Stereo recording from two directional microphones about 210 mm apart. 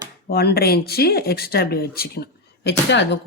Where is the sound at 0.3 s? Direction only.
50° left (ahead or behind).